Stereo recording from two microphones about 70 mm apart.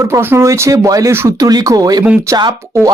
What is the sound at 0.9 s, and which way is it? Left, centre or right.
Speech, right.